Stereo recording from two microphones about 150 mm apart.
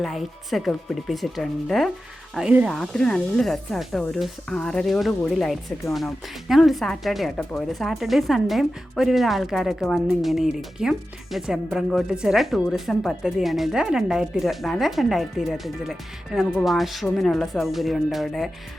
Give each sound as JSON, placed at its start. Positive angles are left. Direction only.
{"t": 0.0, "sound": "speech", "side_deg": 0}